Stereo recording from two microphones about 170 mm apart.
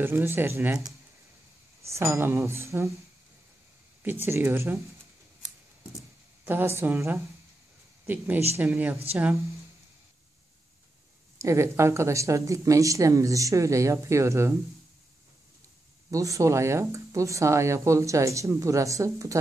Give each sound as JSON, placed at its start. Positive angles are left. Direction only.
{"t": 0.0, "sound": "speech", "side_deg": -15}
{"t": 4.0, "sound": "speech", "side_deg": -10}
{"t": 6.4, "sound": "speech", "side_deg": -15}
{"t": 8.5, "sound": "speech", "side_deg": -10}
{"t": 11.3, "sound": "speech", "side_deg": -15}
{"t": 16.1, "sound": "speech", "side_deg": -20}